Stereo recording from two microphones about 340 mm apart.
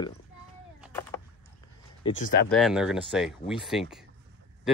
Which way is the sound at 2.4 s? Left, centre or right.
Centre.